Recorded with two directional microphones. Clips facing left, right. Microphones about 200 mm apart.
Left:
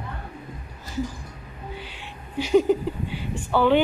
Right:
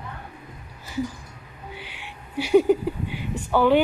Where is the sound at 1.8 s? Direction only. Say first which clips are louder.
Left 2 dB; 15° right (ahead or behind).